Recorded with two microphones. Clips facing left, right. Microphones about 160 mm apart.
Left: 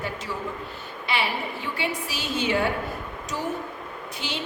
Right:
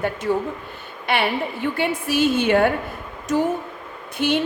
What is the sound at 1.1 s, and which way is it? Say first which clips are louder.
A woman's voice: right 6 dB; 55° right (ahead or behind).